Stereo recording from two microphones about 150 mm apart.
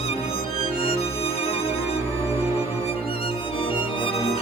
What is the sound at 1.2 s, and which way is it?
Music, 40° left (ahead or behind).